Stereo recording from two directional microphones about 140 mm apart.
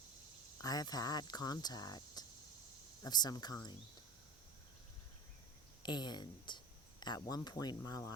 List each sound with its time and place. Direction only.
0.6 s speech: 25° left (ahead or behind)
5.8 s speech: 30° left (ahead or behind)